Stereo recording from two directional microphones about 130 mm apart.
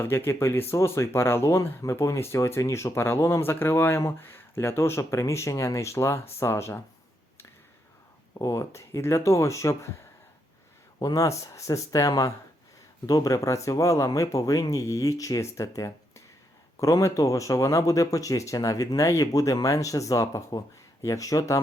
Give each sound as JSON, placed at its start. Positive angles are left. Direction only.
{"t": 0.0, "sound": "speech", "side_deg": 20}
{"t": 8.4, "sound": "speech", "side_deg": 25}
{"t": 11.0, "sound": "speech", "side_deg": 25}